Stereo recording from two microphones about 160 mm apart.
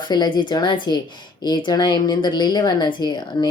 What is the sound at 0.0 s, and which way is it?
Speech, 30° left (ahead or behind).